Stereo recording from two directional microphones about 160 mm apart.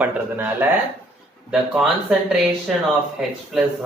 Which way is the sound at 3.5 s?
Centre (ahead or behind).